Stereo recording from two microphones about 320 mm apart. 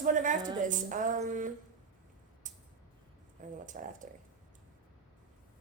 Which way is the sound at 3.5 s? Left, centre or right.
Right.